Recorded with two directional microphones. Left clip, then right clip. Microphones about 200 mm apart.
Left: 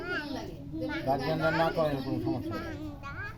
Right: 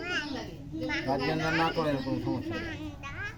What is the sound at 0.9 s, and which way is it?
Speech, 50° left (ahead or behind).